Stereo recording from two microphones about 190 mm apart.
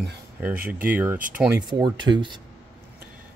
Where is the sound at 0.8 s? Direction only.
10° right (ahead or behind).